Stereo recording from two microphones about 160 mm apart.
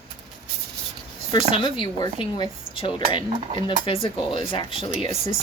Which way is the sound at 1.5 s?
30° left (ahead or behind).